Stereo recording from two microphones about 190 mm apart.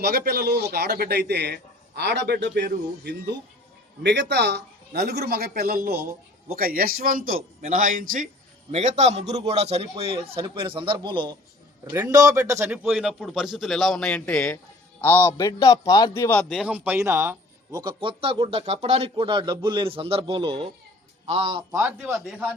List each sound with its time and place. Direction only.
0.0 s a man's voice: 55° right (ahead or behind); by 12.8 s 15° right (ahead or behind)
12.8 s a man's voice: 5° right (ahead or behind); by 21.8 s 25° right (ahead or behind)
21.8 s speech: 15° right (ahead or behind)
22.3 s a man's voice: centre (ahead or behind)